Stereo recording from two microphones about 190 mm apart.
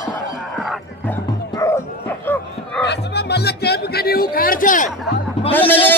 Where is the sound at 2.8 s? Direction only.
60° left (ahead or behind); by 4.9 s 45° left (ahead or behind).